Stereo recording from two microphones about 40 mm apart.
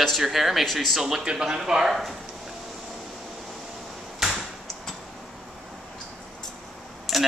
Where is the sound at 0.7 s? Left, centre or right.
Centre.